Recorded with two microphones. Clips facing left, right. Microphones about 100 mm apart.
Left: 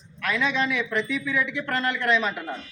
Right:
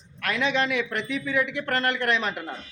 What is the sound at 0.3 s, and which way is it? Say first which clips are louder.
Speech: even; 60° right (ahead or behind).